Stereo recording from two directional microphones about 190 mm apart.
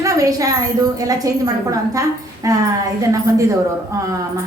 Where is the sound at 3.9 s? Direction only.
15° right (ahead or behind).